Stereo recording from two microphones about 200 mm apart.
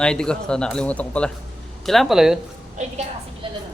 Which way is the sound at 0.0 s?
5° left (ahead or behind).